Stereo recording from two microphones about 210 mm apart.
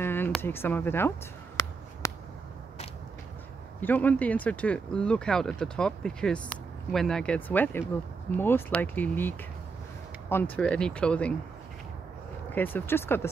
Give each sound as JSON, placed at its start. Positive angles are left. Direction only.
{"t": 0.0, "sound": "speech", "side_deg": 10}
{"t": 2.0, "sound": "a sound", "side_deg": 15}
{"t": 3.8, "sound": "speech", "side_deg": 10}
{"t": 10.3, "sound": "speech", "side_deg": 10}
{"t": 12.5, "sound": "speech", "side_deg": 10}